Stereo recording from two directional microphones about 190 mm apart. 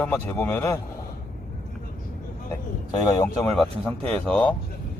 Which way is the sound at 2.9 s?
20° left (ahead or behind).